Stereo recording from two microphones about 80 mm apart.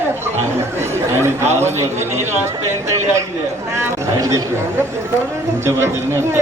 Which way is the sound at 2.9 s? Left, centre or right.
Right.